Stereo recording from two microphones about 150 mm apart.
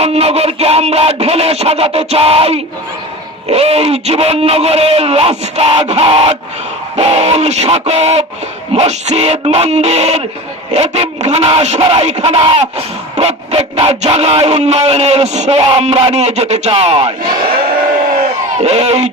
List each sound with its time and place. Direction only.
0.0 s speech: 45° right (ahead or behind)
18.6 s speech: 45° right (ahead or behind)